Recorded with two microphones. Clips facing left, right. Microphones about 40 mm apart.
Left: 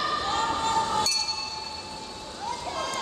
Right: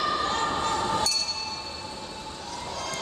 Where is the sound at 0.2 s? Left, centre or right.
Centre.